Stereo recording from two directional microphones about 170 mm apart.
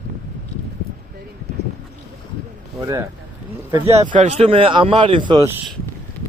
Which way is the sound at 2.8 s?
20° right (ahead or behind).